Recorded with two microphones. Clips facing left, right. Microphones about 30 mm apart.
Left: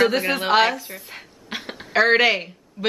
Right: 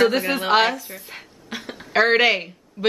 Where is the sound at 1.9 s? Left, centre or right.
Centre.